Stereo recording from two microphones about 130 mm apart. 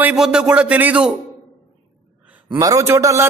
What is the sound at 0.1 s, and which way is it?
A man's voice, 5° right (ahead or behind).